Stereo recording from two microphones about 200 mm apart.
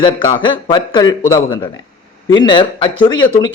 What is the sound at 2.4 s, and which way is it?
Speech, 25° left (ahead or behind).